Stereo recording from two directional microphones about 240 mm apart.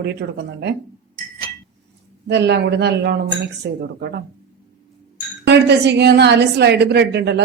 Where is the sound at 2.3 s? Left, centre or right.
Right.